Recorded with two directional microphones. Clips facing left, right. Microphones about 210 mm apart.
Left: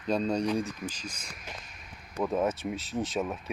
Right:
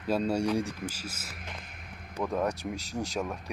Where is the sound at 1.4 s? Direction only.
60° right (ahead or behind).